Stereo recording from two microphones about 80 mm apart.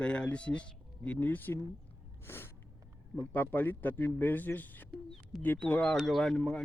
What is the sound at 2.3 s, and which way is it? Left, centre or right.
Gasp, left.